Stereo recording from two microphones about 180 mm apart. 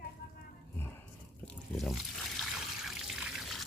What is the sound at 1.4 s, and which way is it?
Trickle, 5° left (ahead or behind).